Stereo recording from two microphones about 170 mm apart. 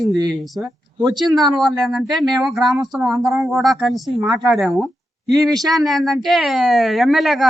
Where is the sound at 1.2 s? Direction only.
Centre (ahead or behind).